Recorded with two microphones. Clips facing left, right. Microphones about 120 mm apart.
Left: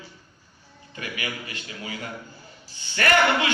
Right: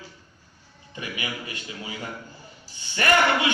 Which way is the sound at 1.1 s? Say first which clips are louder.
Even; 25° right (ahead or behind).